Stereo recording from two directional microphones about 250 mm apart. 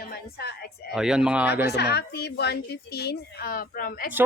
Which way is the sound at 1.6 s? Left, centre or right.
Left.